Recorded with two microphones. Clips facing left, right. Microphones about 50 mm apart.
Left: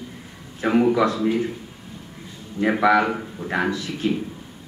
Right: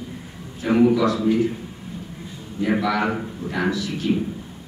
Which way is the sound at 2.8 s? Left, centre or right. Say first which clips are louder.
Left 4 dB; left.